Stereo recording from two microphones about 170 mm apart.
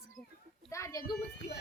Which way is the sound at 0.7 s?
20° left (ahead or behind).